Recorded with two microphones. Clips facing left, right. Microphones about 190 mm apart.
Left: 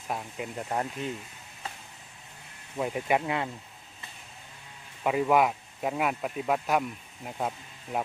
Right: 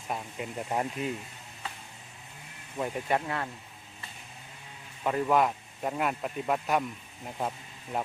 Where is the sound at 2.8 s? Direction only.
5° left (ahead or behind).